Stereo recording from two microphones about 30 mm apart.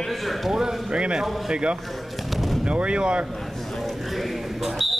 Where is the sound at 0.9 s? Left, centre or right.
Right.